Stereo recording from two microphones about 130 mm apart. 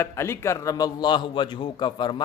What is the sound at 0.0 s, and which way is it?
A man's voice, 20° left (ahead or behind).